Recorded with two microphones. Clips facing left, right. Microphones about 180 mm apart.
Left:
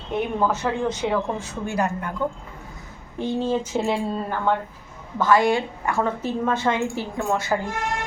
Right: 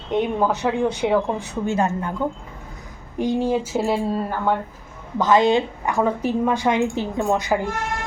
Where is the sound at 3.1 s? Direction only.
15° right (ahead or behind).